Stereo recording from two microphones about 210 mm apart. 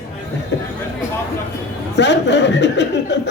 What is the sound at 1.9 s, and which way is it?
A man's voice, 55° left (ahead or behind).